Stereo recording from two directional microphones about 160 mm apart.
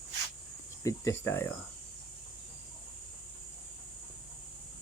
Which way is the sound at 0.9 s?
15° left (ahead or behind).